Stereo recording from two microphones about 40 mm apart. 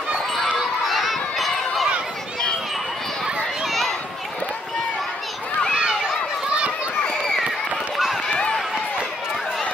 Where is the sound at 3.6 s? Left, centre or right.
Centre.